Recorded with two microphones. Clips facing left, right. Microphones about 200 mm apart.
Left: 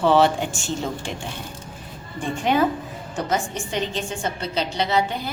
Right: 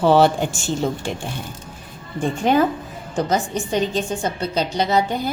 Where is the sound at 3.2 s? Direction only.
40° right (ahead or behind).